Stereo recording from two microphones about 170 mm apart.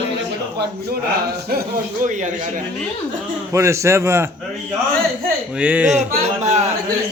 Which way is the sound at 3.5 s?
15° right (ahead or behind).